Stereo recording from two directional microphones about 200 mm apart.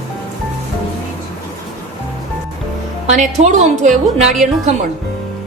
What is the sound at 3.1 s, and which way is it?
Speech, 35° right (ahead or behind).